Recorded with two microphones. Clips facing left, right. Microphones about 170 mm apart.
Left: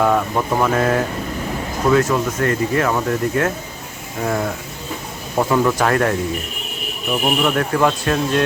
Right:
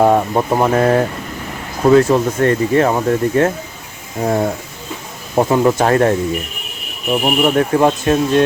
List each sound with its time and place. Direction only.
0.0 s speech: 30° right (ahead or behind)